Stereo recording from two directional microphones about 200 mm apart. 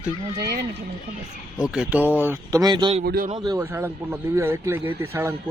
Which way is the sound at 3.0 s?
50° right (ahead or behind).